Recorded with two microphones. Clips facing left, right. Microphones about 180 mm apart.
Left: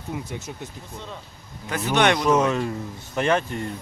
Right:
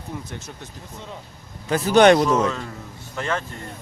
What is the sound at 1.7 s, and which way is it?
Speech, 35° right (ahead or behind).